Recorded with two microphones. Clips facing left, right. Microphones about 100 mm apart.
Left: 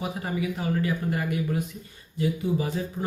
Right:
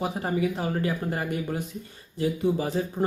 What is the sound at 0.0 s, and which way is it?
Speech, 35° right (ahead or behind).